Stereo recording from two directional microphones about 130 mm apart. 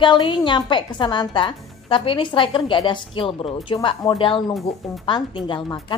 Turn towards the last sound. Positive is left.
turn(degrees=40)  # may be behind; listen again after turning